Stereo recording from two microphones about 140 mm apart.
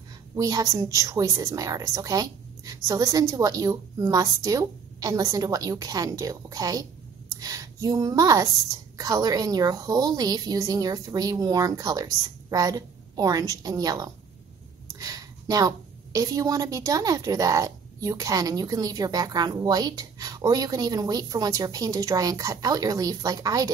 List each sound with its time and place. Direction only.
0.4 s a woman's voice: 25° right (ahead or behind)